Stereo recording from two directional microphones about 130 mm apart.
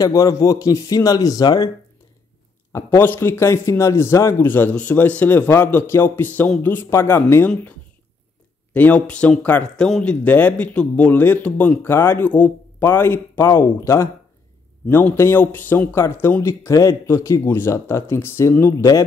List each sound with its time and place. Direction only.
0.0 s speech: 25° left (ahead or behind)
3.0 s a man's voice: 15° left (ahead or behind)
8.7 s a man's voice: 10° left (ahead or behind)